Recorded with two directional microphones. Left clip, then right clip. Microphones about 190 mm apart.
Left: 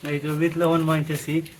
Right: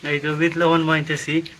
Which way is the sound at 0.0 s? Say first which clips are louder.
Right 4 dB; 5° left (ahead or behind).